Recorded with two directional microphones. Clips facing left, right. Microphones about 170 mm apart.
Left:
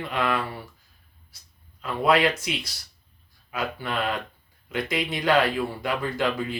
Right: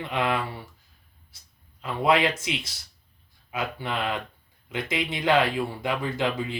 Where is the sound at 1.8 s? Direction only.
20° right (ahead or behind).